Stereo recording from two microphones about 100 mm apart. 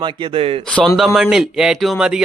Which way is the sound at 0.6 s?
5° left (ahead or behind).